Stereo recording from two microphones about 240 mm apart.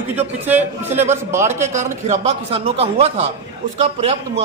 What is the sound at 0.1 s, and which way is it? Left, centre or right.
A man's voice, centre.